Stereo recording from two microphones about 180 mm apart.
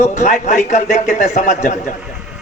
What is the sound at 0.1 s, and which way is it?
A man's voice, 40° left (ahead or behind).